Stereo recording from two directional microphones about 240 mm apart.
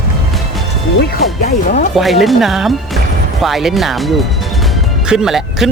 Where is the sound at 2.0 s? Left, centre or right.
Centre.